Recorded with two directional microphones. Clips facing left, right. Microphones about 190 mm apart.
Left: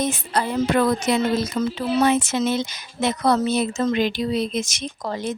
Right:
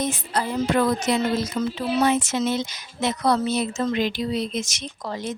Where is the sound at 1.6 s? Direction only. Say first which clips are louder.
Left 2 dB; 55° left (ahead or behind).